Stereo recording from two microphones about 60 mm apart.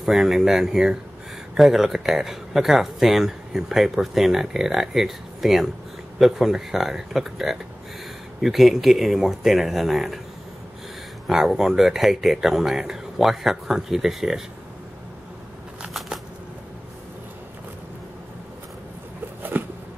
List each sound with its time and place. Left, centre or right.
0.0 s speech: centre
11.2 s speech: centre
19.6 s a sound: right